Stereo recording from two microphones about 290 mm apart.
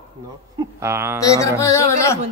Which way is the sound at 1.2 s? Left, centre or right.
Centre.